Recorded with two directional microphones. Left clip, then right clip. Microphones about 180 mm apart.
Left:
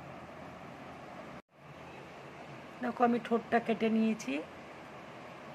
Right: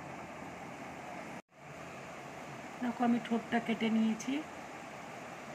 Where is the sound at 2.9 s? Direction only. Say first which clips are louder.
Left 5 dB; 55° left (ahead or behind).